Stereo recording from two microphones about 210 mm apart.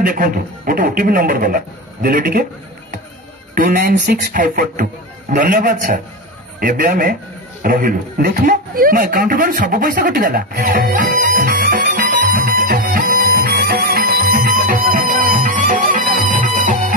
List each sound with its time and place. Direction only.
0.0 s a man's voice: 40° right (ahead or behind)
3.5 s a man's voice: 40° right (ahead or behind)
12.4 s music: 45° right (ahead or behind)